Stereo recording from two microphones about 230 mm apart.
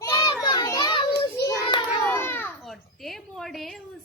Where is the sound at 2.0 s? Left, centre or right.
Centre.